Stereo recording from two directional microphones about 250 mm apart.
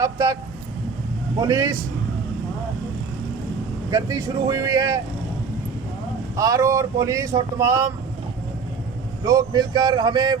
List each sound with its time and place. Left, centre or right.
0.0 s speech: centre
1.4 s speech: centre
3.8 s speech: centre
6.3 s speech: centre
9.2 s speech: centre